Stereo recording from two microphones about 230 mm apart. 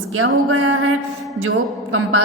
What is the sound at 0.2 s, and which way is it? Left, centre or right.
A woman's voice, right.